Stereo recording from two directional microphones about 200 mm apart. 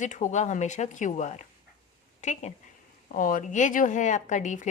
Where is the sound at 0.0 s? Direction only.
40° left (ahead or behind).